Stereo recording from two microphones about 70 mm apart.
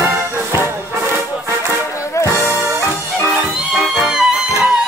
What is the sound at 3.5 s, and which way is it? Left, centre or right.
Music, centre.